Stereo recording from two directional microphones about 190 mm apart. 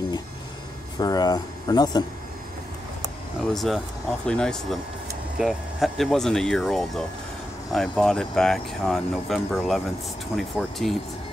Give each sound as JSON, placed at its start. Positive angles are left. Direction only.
{"t": 0.9, "sound": "speech", "side_deg": 20}
{"t": 3.4, "sound": "speech", "side_deg": 0}